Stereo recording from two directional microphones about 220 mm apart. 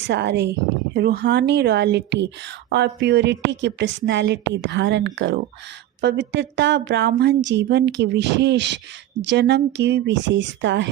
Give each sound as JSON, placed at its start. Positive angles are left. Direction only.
{"t": 0.1, "sound": "speech", "side_deg": -50}